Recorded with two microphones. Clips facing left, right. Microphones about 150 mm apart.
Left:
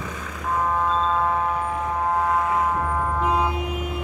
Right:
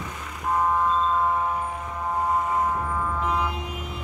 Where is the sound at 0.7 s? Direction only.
90° left.